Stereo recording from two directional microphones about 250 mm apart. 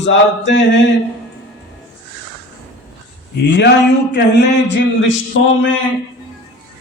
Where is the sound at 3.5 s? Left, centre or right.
Left.